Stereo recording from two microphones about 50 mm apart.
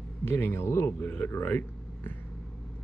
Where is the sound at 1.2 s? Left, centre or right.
Left.